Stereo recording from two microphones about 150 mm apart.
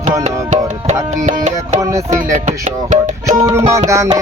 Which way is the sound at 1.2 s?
50° right (ahead or behind).